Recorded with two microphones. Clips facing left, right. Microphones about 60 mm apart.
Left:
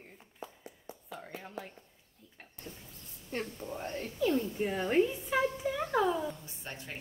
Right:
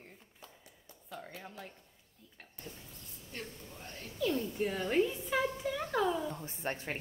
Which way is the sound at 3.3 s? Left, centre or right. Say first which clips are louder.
Left 9 dB; left.